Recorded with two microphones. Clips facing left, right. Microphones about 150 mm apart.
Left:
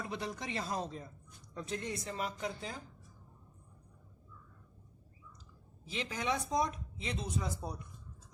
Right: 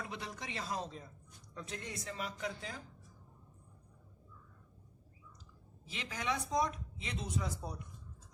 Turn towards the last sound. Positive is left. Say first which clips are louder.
# left 2 dB
turn(degrees=30)  # may be behind; listen again after turning